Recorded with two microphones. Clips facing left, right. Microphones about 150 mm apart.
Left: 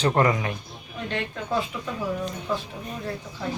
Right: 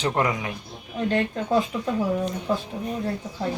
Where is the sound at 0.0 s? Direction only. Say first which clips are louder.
Left 2 dB; 5° right (ahead or behind).